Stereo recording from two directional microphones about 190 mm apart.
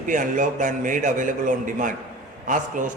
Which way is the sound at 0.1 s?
45° right (ahead or behind).